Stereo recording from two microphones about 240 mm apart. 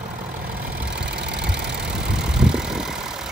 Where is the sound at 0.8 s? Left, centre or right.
Right.